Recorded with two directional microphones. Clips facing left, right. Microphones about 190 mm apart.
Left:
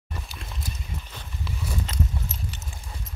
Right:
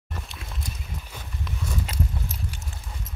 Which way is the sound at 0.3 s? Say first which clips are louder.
Even; centre (ahead or behind).